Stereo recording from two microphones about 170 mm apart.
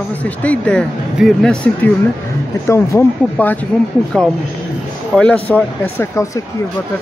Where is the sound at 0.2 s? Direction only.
10° left (ahead or behind).